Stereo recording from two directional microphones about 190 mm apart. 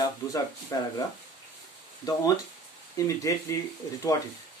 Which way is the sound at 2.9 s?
15° left (ahead or behind).